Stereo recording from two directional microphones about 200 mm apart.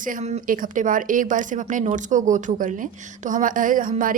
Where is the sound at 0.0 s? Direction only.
40° right (ahead or behind).